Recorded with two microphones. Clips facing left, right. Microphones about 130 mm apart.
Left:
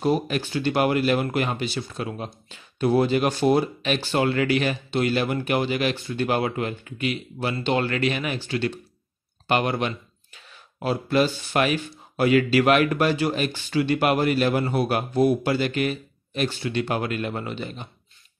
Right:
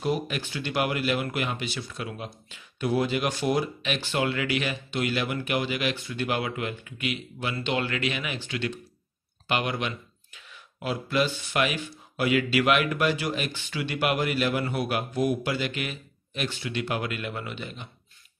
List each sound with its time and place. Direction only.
0.0 s speech: 35° left (ahead or behind)